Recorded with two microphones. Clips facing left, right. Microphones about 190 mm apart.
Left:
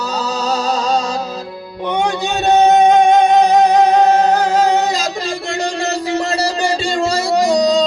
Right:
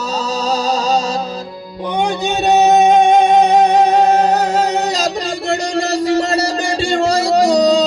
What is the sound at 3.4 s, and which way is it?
Music, 25° right (ahead or behind).